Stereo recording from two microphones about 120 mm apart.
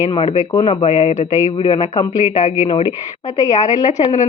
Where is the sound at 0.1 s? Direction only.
45° left (ahead or behind); by 1.5 s 75° left (ahead or behind).